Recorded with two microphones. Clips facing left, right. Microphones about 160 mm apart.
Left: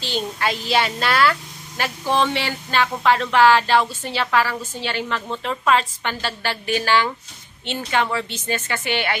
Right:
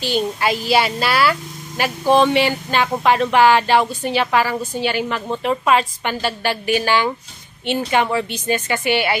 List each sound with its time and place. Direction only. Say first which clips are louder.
0.0 s speech: right 5 dB; 10° right (ahead or behind)